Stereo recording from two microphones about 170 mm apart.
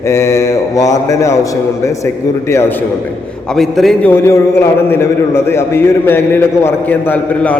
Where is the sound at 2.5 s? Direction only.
15° left (ahead or behind).